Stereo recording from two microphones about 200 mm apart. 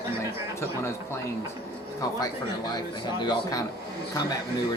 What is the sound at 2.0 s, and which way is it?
Speech, 20° left (ahead or behind).